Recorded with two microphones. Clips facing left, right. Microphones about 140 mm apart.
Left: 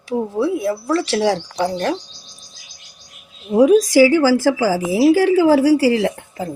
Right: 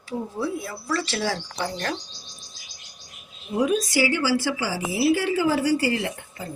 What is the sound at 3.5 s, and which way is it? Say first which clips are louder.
A woman's voice: left 11 dB; 90° left.